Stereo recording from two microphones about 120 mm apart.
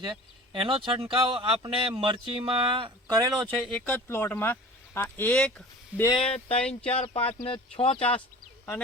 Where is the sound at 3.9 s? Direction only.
20° left (ahead or behind).